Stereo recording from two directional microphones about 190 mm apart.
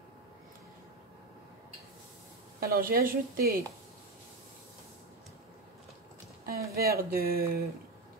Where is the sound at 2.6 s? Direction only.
50° right (ahead or behind).